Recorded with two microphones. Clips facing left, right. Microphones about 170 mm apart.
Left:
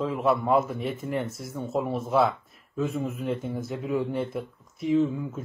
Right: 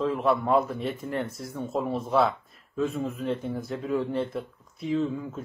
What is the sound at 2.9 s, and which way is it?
Speech, 20° left (ahead or behind).